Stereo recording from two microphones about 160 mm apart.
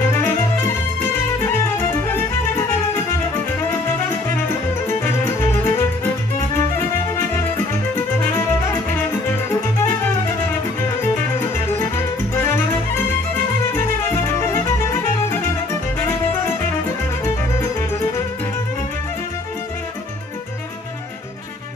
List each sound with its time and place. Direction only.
0.1 s music: 15° left (ahead or behind)
4.8 s music: 15° left (ahead or behind)
7.9 s music: 15° left (ahead or behind)
13.7 s music: 15° left (ahead or behind)